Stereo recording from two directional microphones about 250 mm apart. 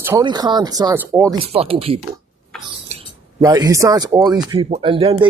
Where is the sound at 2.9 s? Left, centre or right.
Right.